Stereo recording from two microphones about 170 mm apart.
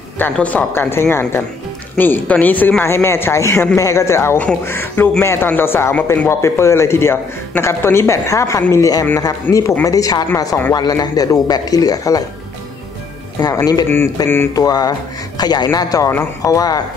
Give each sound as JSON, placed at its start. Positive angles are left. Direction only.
{"t": 0.2, "sound": "speech", "side_deg": 10}
{"t": 13.4, "sound": "speech", "side_deg": 20}